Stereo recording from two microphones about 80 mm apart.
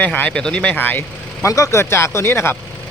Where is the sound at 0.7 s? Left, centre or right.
Left.